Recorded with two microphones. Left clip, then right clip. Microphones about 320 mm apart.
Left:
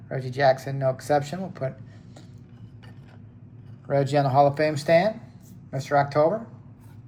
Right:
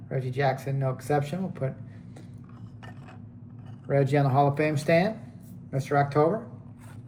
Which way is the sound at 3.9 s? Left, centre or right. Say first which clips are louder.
Left 3 dB; centre.